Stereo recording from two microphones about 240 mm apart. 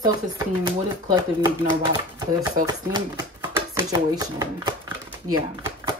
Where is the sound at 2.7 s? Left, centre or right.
Centre.